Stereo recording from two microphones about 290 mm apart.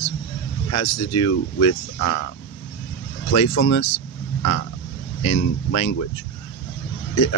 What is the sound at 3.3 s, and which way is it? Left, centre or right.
Speech, left.